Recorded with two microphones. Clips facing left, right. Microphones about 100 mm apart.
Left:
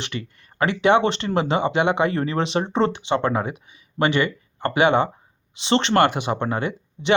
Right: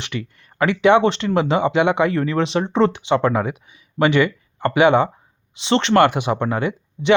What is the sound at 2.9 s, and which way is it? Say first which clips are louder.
Speech: right 3 dB; 5° right (ahead or behind).